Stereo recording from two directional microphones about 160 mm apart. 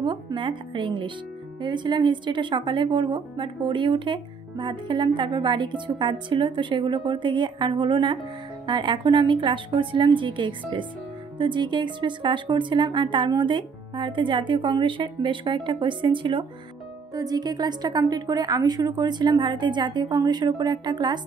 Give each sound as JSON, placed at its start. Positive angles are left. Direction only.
{"t": 0.0, "sound": "a woman's voice", "side_deg": -30}